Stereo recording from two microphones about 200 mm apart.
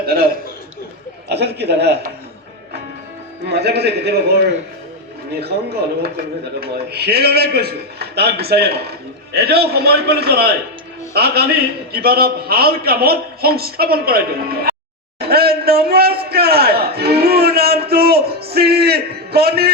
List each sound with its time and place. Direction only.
0.0 s a man's voice: 50° right (ahead or behind)
1.3 s a man's voice: 55° right (ahead or behind)
3.4 s a man's voice: 55° right (ahead or behind)
5.4 s a man's voice: 55° right (ahead or behind)
15.2 s a sound: 50° right (ahead or behind)